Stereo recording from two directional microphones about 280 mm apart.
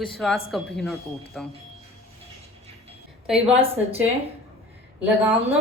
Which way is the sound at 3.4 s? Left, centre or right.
Right.